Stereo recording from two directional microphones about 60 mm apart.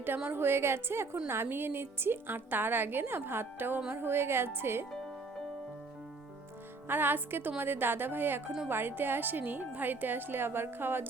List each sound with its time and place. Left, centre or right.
0.3 s a woman's voice: right
6.8 s a woman's voice: right